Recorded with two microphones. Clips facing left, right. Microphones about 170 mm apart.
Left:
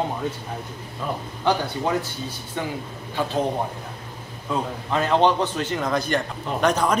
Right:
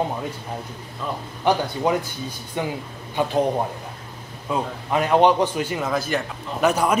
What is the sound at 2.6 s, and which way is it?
Speech, 15° right (ahead or behind).